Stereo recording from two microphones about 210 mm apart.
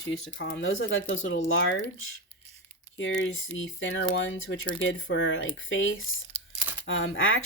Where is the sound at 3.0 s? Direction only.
65° left (ahead or behind).